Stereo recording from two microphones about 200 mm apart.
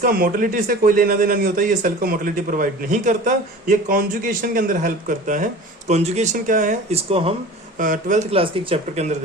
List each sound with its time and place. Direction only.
0.0 s a man's voice: 45° right (ahead or behind)
7.1 s speech: 30° right (ahead or behind)
7.8 s speech: 40° right (ahead or behind)
8.3 s speech: 30° right (ahead or behind)